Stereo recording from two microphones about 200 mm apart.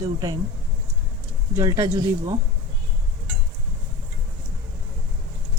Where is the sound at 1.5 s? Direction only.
15° right (ahead or behind).